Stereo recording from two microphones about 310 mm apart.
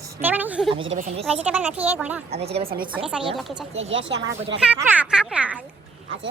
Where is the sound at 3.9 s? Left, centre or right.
Right.